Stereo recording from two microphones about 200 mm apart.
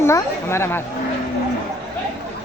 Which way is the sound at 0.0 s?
10° left (ahead or behind).